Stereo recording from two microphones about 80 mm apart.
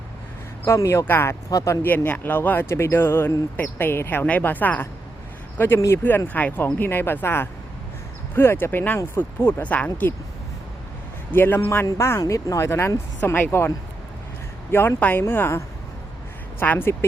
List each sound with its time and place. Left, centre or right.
0.6 s speech: left
1.5 s speech: left
1.8 s a man's voice: left
9.6 s a man's voice: centre
11.3 s a man's voice: left
12.2 s a man's voice: left